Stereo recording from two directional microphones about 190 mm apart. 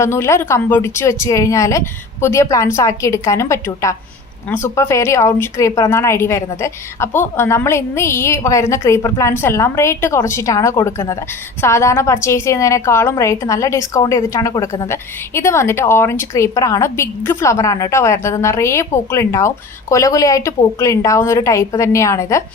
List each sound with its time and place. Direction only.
0.0 s a woman's voice: 15° left (ahead or behind)